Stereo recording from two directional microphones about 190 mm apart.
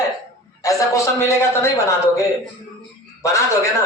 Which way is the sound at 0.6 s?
15° left (ahead or behind).